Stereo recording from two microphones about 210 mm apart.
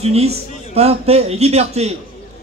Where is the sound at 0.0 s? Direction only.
30° right (ahead or behind).